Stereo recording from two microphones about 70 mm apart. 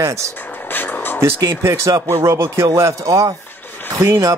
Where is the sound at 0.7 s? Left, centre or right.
Left.